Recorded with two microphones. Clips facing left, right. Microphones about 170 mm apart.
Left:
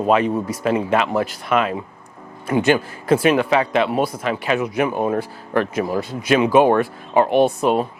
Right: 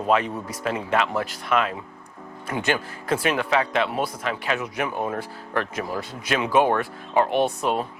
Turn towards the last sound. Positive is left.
turn(degrees=10)  # may be behind; listen again after turning